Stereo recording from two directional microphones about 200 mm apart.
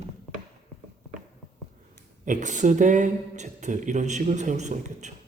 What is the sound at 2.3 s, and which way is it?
A man's voice, 40° right (ahead or behind).